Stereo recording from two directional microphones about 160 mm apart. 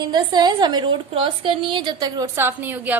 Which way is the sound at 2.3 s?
15° right (ahead or behind).